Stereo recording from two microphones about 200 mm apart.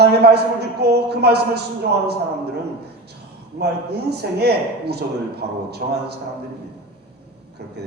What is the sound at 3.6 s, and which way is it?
A man's voice, 55° right (ahead or behind).